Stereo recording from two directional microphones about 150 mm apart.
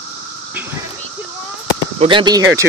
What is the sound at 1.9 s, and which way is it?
Speech, 35° right (ahead or behind).